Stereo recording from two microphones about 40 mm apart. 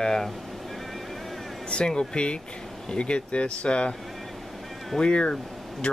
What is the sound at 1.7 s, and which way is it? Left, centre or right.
Speech, left.